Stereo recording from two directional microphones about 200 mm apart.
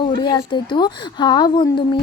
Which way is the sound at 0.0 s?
20° left (ahead or behind).